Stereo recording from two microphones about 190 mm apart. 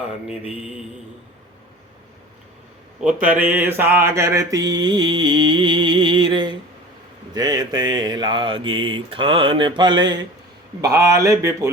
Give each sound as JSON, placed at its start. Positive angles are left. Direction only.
{"t": 3.0, "sound": "speech", "side_deg": -5}
{"t": 3.3, "sound": "mantra", "side_deg": -10}
{"t": 10.8, "sound": "speech", "side_deg": -20}